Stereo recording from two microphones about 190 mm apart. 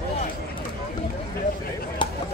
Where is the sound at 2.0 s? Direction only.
25° left (ahead or behind).